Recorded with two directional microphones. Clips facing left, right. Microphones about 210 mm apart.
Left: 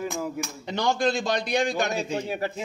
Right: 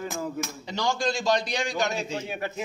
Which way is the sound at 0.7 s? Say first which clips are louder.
Left 4 dB; 55° left (ahead or behind).